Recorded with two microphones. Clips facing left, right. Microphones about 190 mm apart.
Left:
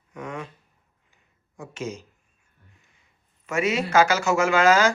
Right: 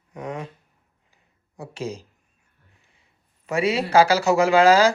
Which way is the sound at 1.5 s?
35° right (ahead or behind).